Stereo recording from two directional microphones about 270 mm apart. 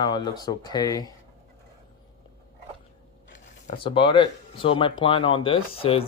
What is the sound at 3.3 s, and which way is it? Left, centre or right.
Speech, centre.